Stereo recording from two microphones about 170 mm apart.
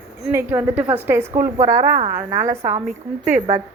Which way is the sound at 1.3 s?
50° right (ahead or behind).